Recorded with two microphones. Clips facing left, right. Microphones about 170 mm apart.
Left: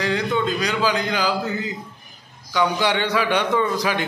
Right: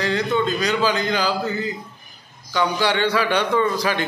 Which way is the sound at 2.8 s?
20° left (ahead or behind).